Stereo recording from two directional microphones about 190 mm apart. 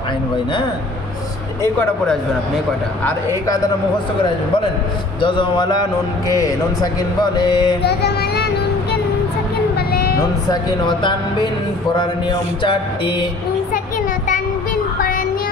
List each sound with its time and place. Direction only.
5.2 s a man's voice: 25° left (ahead or behind)
7.8 s music: 60° left (ahead or behind)
10.5 s a man's voice: 25° left (ahead or behind)